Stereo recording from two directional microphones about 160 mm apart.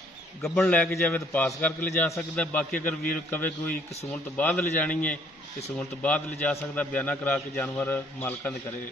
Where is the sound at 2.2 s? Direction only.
5° left (ahead or behind).